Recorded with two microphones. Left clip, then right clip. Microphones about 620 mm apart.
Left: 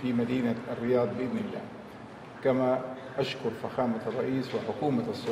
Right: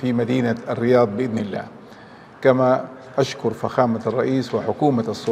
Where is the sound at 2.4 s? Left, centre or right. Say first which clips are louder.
Right 10 dB; right.